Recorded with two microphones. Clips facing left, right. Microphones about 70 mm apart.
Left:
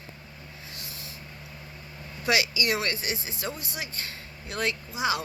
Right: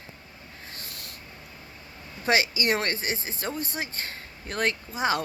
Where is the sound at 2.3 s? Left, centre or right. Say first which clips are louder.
Right 2 dB; right.